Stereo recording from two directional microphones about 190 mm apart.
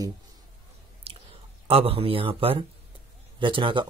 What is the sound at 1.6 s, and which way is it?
Speech, 30° right (ahead or behind).